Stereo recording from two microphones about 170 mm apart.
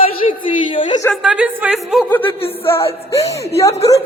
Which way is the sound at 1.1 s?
5° right (ahead or behind).